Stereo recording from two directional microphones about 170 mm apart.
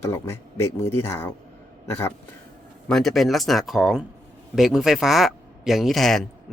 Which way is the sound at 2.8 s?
Centre (ahead or behind).